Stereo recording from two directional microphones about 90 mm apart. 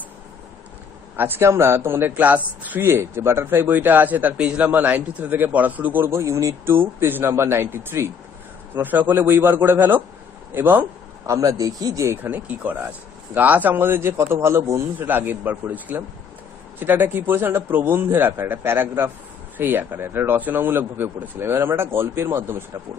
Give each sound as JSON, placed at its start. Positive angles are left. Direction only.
{"t": 1.1, "sound": "a man's voice", "side_deg": -25}
{"t": 11.2, "sound": "speech", "side_deg": -35}
{"t": 12.2, "sound": "a man's voice", "side_deg": -15}